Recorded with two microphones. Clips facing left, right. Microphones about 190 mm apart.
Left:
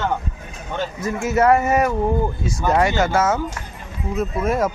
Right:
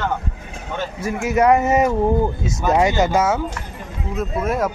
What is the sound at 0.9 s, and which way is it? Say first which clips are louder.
Speech: right 1 dB; 10° right (ahead or behind).